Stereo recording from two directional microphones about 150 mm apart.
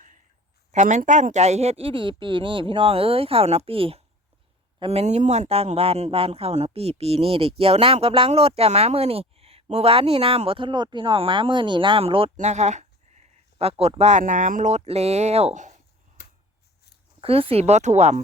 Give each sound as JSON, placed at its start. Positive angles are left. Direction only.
{"t": 0.7, "sound": "speech", "side_deg": -50}
{"t": 17.2, "sound": "speech", "side_deg": -40}